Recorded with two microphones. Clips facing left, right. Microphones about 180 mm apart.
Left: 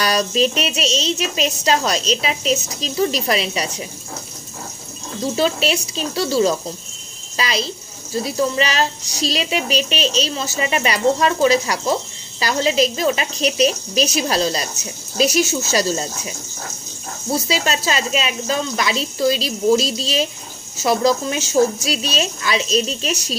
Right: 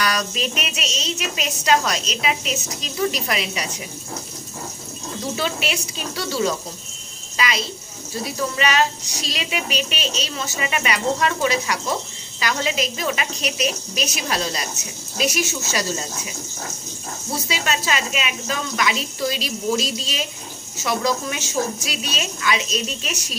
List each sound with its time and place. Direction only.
0.0 s a woman's voice: 30° left (ahead or behind)
5.3 s a woman's voice: 35° left (ahead or behind)
17.5 s a woman's voice: 30° left (ahead or behind)